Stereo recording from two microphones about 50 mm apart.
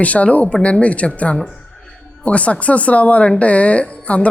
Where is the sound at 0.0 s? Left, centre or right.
Left.